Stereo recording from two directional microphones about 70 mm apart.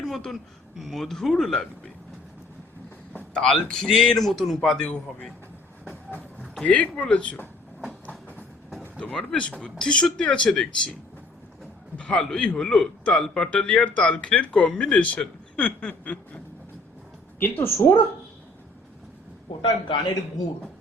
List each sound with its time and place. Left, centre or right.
0.0 s a sound: centre
0.8 s speech: centre
3.1 s a man's voice: centre
6.7 s speech: centre
9.0 s a man's voice: centre
11.9 s a man's voice: centre
17.4 s a woman's voice: left